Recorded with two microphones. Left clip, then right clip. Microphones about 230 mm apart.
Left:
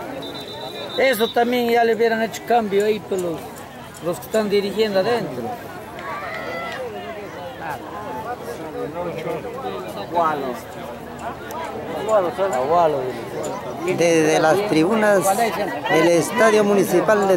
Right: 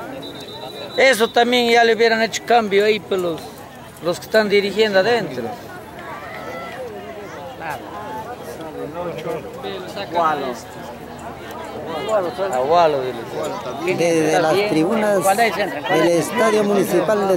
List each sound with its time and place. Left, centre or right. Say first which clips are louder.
0.9 s speech: right 4 dB; centre
9.0 s speech: even; centre
11.9 s speech: left 1 dB; centre
15.2 s speech: right 3 dB; centre
16.6 s speech: even; centre